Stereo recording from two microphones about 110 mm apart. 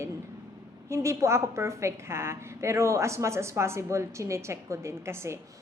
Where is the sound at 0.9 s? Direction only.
25° right (ahead or behind).